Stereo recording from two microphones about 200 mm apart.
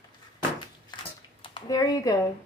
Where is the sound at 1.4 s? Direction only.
20° left (ahead or behind).